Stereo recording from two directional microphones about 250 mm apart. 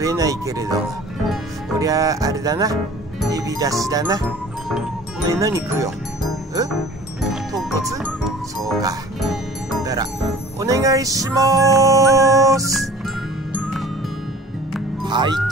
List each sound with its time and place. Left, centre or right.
0.0 s music: centre
1.8 s music: centre
3.3 s speech: centre
5.3 s music: centre
7.2 s music: centre
8.5 s speech: centre
9.2 s music: centre
10.6 s music: centre
15.0 s music: centre